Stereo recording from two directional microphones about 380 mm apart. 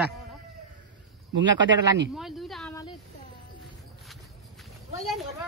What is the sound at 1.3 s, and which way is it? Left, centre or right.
Speech, right.